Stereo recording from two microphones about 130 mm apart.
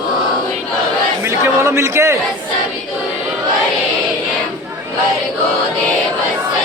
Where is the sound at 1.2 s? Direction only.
20° right (ahead or behind).